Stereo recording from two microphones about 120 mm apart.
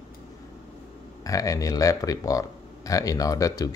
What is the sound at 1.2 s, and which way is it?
Speech, 30° left (ahead or behind).